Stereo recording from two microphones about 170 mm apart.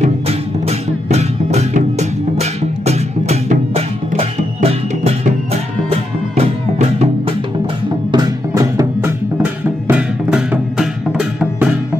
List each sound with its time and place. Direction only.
0.0 s music: 40° right (ahead or behind)
8.1 s music: 20° right (ahead or behind); by 11.7 s 5° right (ahead or behind)